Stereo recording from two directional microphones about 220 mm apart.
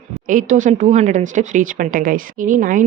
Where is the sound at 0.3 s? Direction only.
35° right (ahead or behind).